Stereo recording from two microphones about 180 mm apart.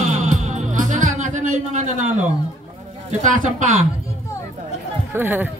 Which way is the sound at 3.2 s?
45° right (ahead or behind).